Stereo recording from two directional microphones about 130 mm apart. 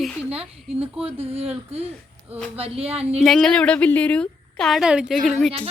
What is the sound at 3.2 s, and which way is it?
A woman's voice, 5° left (ahead or behind).